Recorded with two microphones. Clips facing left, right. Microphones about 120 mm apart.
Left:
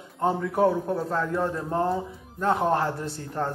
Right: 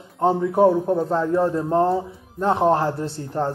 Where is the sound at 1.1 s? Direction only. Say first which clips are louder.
Right 6 dB; 25° right (ahead or behind).